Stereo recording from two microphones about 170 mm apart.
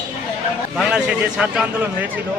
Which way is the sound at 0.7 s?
5° right (ahead or behind).